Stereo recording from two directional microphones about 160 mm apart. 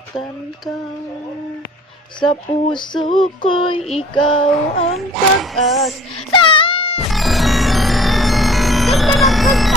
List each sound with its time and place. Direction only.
2.1 s female singing: 30° left (ahead or behind)
4.3 s a sound: 35° left (ahead or behind)
5.1 s music: centre (ahead or behind)
6.3 s wail: 30° left (ahead or behind)
7.1 s music: centre (ahead or behind)